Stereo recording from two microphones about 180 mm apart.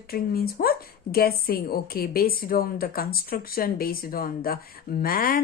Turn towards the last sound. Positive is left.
turn(degrees=55)  # may be behind; listen again after turning